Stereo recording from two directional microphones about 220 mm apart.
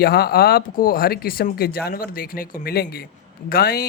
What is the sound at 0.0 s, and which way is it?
Speech, 45° left (ahead or behind).